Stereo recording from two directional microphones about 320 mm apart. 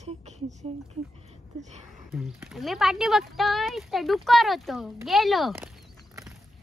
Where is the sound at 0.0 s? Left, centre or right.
Right.